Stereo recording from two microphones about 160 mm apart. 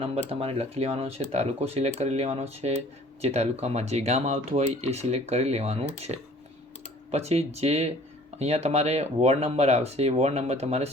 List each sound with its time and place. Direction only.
0.0 s speech: 40° right (ahead or behind)